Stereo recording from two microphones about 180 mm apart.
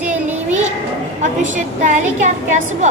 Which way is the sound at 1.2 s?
40° right (ahead or behind).